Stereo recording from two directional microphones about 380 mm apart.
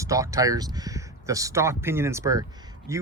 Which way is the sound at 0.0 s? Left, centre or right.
Centre.